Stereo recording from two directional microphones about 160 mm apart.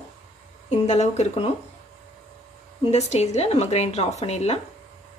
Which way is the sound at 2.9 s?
45° left (ahead or behind).